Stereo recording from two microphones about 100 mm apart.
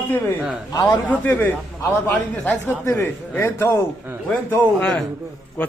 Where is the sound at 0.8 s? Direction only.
15° left (ahead or behind).